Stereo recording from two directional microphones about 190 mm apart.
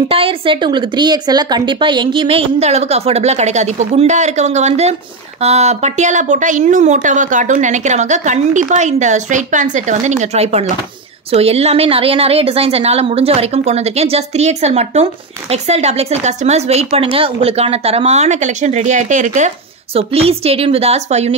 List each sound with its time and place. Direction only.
0.1 s a woman's voice: 30° right (ahead or behind)